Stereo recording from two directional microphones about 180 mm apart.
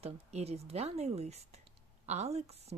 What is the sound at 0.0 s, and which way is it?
Speech, 35° right (ahead or behind).